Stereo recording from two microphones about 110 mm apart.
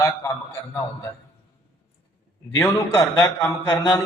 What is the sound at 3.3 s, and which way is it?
Mantra, 30° left (ahead or behind).